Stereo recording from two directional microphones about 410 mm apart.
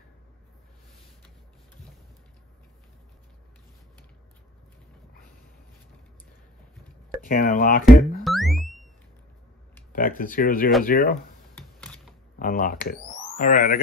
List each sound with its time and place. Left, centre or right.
7.2 s speech: centre
7.8 s music: centre
9.9 s speech: left
11.5 s typing: centre
12.4 s speech: centre